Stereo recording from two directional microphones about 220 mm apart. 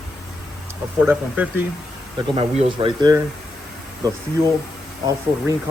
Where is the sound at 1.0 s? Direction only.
5° right (ahead or behind).